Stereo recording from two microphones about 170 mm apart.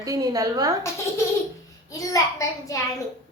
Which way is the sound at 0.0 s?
20° right (ahead or behind).